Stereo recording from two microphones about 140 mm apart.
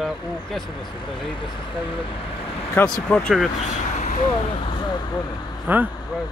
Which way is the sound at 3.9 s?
60° left (ahead or behind).